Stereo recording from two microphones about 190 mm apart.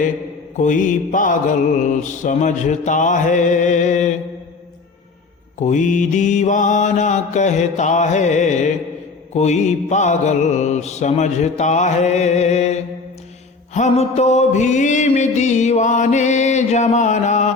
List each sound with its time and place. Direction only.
0.5 s music: 40° left (ahead or behind)
5.5 s music: 40° left (ahead or behind)